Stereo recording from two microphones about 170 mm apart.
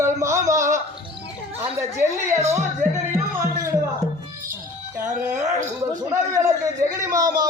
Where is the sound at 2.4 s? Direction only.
40° right (ahead or behind).